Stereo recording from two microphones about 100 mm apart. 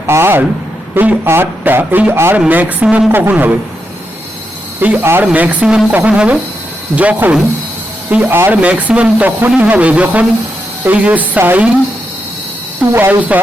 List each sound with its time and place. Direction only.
0.1 s a man's voice: 25° right (ahead or behind)
4.8 s a man's voice: 20° right (ahead or behind)
8.7 s speech: 10° right (ahead or behind)
12.8 s a man's voice: 20° right (ahead or behind)